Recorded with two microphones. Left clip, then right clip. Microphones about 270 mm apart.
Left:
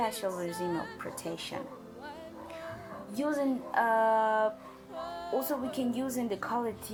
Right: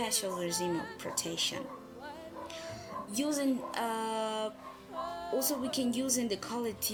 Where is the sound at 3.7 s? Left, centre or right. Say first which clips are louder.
Left 8 dB; centre.